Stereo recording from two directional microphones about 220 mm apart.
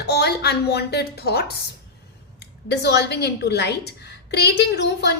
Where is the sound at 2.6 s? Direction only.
50° left (ahead or behind).